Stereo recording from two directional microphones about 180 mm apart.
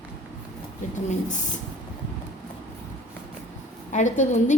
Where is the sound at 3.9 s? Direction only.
45° left (ahead or behind).